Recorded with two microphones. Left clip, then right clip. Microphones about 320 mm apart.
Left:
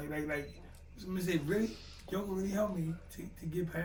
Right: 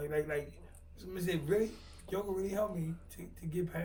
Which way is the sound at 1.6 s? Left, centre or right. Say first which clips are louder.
Right 1 dB; right.